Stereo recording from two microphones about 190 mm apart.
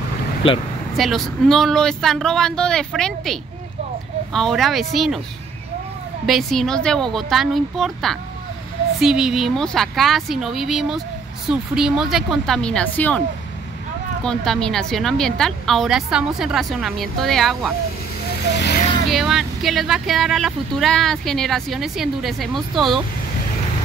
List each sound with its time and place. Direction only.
0.4 s speech: 30° left (ahead or behind)
0.9 s speech: centre (ahead or behind)
6.2 s speech: centre (ahead or behind)
14.2 s speech: 5° left (ahead or behind)
18.5 s speech: 65° left (ahead or behind)
19.0 s speech: centre (ahead or behind)